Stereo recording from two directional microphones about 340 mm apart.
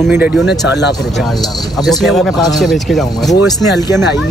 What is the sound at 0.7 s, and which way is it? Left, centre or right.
Speech, left.